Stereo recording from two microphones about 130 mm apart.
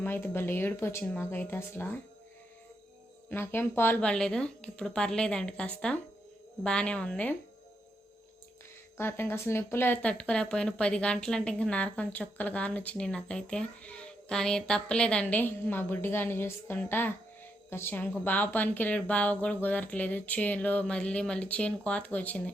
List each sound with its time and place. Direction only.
0.0 s speech: 15° left (ahead or behind)
3.2 s speech: 15° left (ahead or behind)
9.0 s a woman's voice: 15° left (ahead or behind)